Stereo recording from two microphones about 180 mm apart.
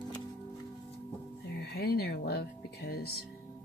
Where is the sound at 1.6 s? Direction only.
65° left (ahead or behind).